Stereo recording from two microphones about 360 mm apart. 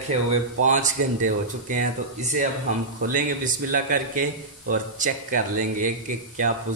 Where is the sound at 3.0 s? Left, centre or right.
Right.